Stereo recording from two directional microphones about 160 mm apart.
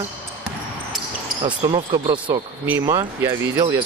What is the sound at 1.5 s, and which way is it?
Speech, 30° right (ahead or behind).